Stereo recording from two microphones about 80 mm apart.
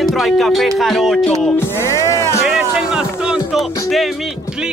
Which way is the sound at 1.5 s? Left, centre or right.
Left.